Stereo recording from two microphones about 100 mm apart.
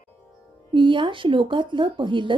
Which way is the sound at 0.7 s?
55° right (ahead or behind).